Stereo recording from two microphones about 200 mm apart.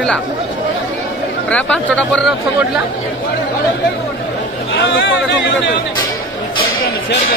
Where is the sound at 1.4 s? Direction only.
5° left (ahead or behind).